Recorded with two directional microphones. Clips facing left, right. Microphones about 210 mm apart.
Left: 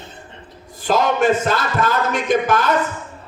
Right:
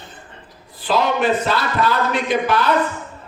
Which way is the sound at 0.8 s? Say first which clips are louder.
Left 2 dB; 45° left (ahead or behind).